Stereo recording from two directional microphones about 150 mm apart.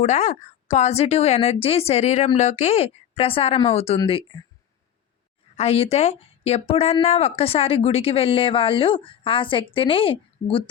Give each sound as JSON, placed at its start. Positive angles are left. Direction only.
{"t": 0.0, "sound": "a woman's voice", "side_deg": 50}
{"t": 5.5, "sound": "speech", "side_deg": 40}